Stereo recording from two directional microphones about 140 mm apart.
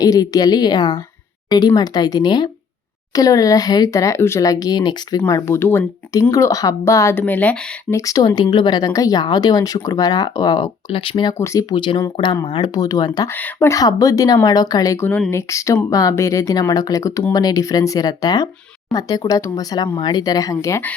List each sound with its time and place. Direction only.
0.0 s speech: 25° left (ahead or behind)
5.2 s speech: 15° left (ahead or behind); by 11.3 s 35° left (ahead or behind)
11.3 s speech: 20° left (ahead or behind)
11.7 s speech: 35° left (ahead or behind)
13.3 s speech: 15° left (ahead or behind)